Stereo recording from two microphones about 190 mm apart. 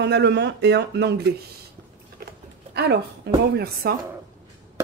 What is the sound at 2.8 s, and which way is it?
Speech, 60° right (ahead or behind).